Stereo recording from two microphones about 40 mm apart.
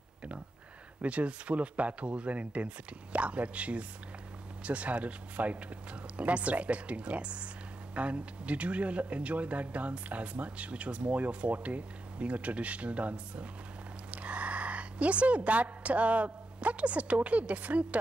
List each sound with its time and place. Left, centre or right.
1.0 s a woman's voice: right